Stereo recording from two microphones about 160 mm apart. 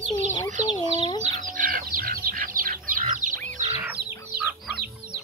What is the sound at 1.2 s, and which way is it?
Chicken, 60° right (ahead or behind).